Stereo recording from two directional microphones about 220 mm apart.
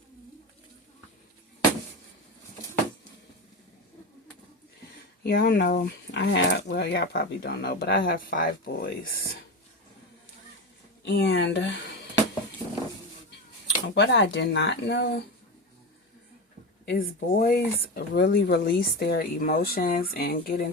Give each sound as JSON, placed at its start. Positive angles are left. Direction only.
{"t": 5.2, "sound": "speech", "side_deg": 45}
{"t": 11.0, "sound": "speech", "side_deg": 50}
{"t": 13.3, "sound": "speech", "side_deg": 50}
{"t": 16.8, "sound": "speech", "side_deg": 45}